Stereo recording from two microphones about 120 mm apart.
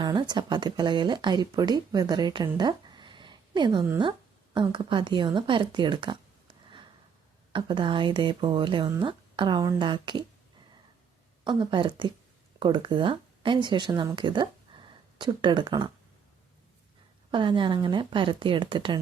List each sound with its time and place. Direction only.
0.0 s speech: 40° right (ahead or behind)
7.5 s speech: 45° right (ahead or behind)
11.4 s speech: 40° right (ahead or behind)
17.3 s speech: 45° right (ahead or behind)